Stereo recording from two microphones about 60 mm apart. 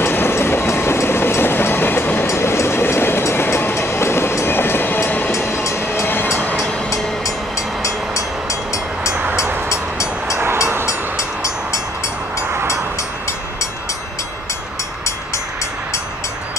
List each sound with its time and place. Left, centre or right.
0.0 s train: left
2.2 s train: left
5.3 s train: left
5.9 s train: left
7.8 s vehicle: left
10.9 s train: left